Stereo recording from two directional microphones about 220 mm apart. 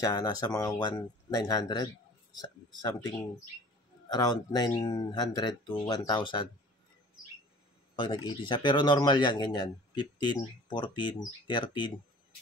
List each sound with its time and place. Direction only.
0.0 s speech: 15° left (ahead or behind)
4.1 s speech: 20° left (ahead or behind)
7.9 s speech: 20° left (ahead or behind)